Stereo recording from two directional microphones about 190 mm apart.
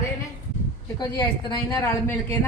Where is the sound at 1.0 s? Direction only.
20° left (ahead or behind).